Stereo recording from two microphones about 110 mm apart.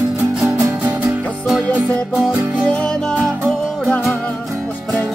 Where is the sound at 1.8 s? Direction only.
Centre (ahead or behind).